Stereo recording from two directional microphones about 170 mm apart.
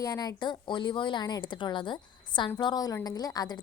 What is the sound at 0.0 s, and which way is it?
Speech, 20° left (ahead or behind).